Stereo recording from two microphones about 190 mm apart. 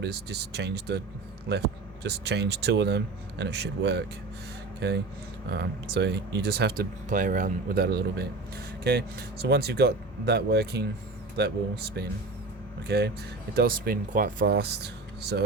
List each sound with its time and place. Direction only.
0.0 s speech: 60° right (ahead or behind)
2.0 s speech: 60° right (ahead or behind)
5.5 s speech: 60° right (ahead or behind)
7.1 s speech: 40° right (ahead or behind)
7.9 s speech: 60° right (ahead or behind)
13.6 s speech: 55° right (ahead or behind)